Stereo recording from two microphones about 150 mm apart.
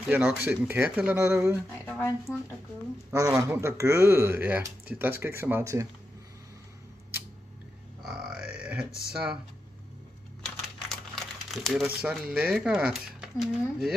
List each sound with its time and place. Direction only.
0.1 s speech: 10° right (ahead or behind)
1.7 s speech: 15° left (ahead or behind)
3.1 s speech: 20° right (ahead or behind)
8.0 s grunt: 5° right (ahead or behind)
9.1 s speech: 5° right (ahead or behind)
10.4 s speech: centre (ahead or behind)